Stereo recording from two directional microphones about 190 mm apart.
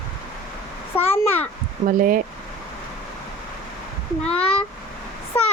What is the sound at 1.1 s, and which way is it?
Speech, 10° left (ahead or behind).